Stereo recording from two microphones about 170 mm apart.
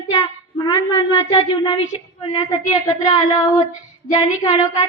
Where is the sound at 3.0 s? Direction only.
25° left (ahead or behind).